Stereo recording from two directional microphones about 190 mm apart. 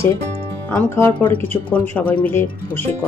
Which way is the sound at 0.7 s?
10° left (ahead or behind).